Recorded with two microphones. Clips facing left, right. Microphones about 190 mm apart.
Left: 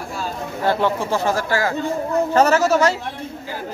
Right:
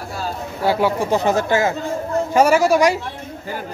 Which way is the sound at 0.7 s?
10° right (ahead or behind).